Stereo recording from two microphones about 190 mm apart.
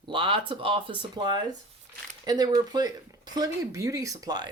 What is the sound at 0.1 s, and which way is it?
Speech, 25° right (ahead or behind).